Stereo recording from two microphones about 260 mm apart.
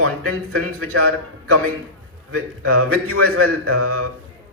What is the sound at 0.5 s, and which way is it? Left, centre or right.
A man's voice, right.